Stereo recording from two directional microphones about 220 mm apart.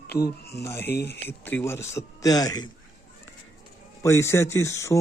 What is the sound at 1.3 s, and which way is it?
Speech, 10° left (ahead or behind).